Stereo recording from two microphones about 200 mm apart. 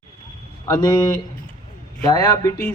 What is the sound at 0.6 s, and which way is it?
A woman's voice, 20° left (ahead or behind).